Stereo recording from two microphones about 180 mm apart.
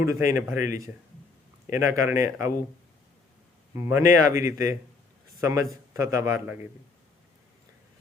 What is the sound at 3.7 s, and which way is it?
A man's voice, 15° right (ahead or behind).